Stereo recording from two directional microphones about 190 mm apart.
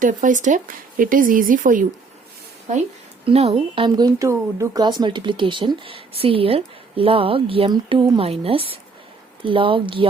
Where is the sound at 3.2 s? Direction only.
30° right (ahead or behind).